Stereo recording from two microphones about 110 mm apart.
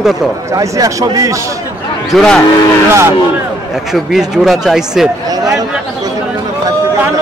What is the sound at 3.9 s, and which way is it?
Speech, 5° right (ahead or behind).